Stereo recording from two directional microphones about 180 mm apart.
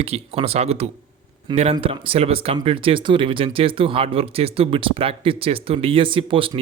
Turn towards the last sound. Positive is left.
turn(degrees=-30)  # may be behind; listen again after turning